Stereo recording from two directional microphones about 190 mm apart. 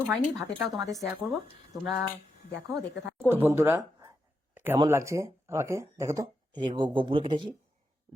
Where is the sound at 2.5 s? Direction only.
65° left (ahead or behind).